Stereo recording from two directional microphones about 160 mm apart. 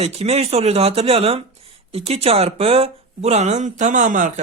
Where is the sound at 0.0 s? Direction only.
40° right (ahead or behind).